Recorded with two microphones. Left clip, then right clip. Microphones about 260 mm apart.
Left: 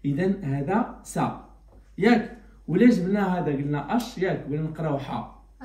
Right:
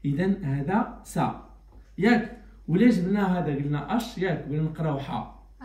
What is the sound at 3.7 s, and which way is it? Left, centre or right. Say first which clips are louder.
Speech: left 2 dB; right.